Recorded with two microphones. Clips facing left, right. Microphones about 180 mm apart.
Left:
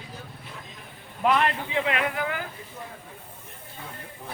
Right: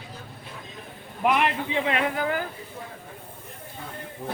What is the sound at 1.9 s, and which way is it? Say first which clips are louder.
Speech: right 2 dB; 35° right (ahead or behind).